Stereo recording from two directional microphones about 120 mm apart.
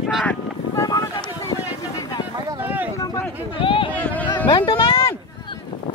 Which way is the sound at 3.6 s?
45° left (ahead or behind).